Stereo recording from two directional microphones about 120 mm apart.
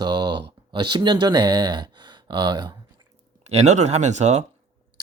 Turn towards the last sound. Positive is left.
turn(degrees=-70)  # may be behind; listen again after turning